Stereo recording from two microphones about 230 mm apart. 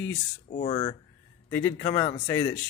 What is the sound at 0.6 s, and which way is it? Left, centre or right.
Speech, left.